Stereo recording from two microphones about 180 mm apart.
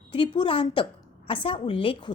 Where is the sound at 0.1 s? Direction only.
30° left (ahead or behind).